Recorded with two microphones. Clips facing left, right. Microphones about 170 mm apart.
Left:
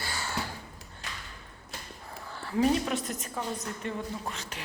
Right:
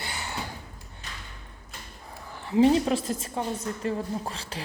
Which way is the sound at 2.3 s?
20° right (ahead or behind).